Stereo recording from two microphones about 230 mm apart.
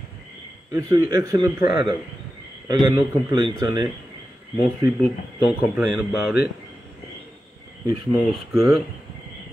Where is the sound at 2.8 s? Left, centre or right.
Centre.